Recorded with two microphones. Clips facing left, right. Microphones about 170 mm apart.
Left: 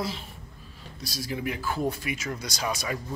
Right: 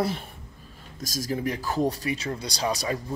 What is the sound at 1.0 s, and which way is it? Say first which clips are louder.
Speech: right 3 dB; 45° right (ahead or behind).